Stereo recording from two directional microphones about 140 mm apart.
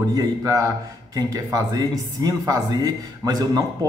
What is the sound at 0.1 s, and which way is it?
Speech, 25° right (ahead or behind).